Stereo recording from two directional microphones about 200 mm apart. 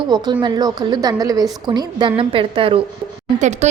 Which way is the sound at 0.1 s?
20° right (ahead or behind).